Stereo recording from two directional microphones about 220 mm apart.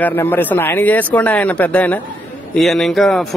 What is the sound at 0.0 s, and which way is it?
Speech, 10° left (ahead or behind).